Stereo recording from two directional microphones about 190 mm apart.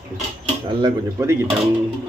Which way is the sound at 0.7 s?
25° right (ahead or behind).